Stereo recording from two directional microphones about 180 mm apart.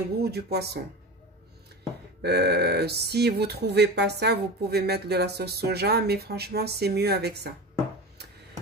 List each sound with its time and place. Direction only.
0.2 s speech: 60° right (ahead or behind)
2.2 s speech: 65° right (ahead or behind)